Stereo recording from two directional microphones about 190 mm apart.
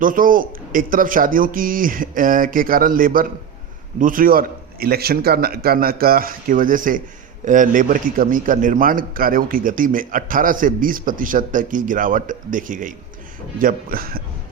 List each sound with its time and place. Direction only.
0.0 s a man's voice: 45° right (ahead or behind)